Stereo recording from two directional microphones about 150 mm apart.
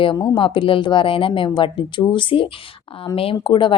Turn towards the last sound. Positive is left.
turn(degrees=35)  # may be behind; listen again after turning